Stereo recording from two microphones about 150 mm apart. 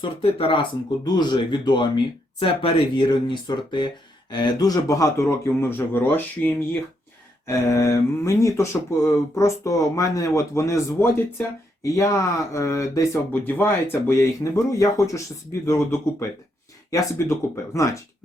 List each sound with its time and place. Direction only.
0.0 s speech: 35° left (ahead or behind); by 17.9 s 20° left (ahead or behind)